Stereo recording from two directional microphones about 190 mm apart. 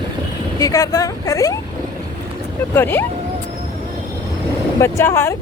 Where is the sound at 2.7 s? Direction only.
10° left (ahead or behind).